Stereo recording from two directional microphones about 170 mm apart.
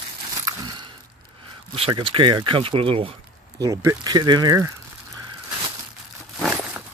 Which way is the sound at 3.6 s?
20° right (ahead or behind).